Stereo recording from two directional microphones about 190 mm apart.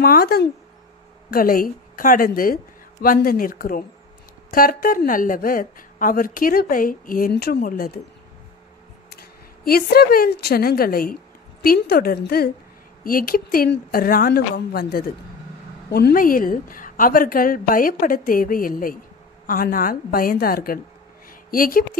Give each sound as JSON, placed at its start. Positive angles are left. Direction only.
{"t": 0.0, "sound": "speech", "side_deg": 55}
{"t": 9.1, "sound": "speech", "side_deg": 55}
{"t": 21.3, "sound": "a sound", "side_deg": 50}